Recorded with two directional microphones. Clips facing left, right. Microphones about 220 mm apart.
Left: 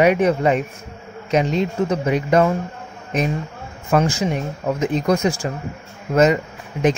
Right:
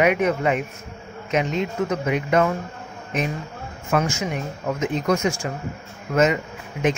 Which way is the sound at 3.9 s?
35° left (ahead or behind).